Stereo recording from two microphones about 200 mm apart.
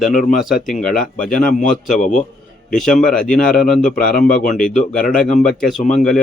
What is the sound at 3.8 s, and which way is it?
Speech, 45° left (ahead or behind).